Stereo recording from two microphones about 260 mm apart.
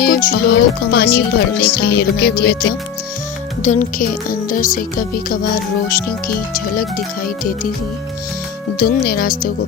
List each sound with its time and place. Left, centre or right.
0.0 s speech: left
3.6 s speech: left
8.8 s speech: left